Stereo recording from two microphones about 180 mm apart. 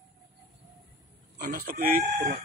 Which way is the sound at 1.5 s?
55° right (ahead or behind).